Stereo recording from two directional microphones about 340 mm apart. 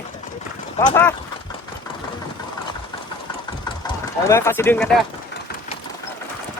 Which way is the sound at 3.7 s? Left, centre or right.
Centre.